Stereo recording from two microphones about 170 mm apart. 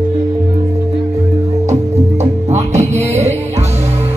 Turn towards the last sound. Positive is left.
turn(degrees=-40)  # may be behind; listen again after turning